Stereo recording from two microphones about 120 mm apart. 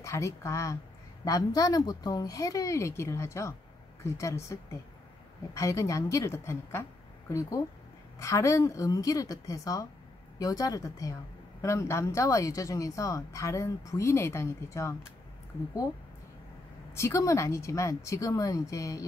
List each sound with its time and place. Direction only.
0.0 s speech: 25° left (ahead or behind)
16.9 s speech: 25° left (ahead or behind)